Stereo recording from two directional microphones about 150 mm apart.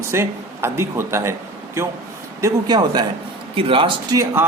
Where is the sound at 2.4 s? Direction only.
30° right (ahead or behind).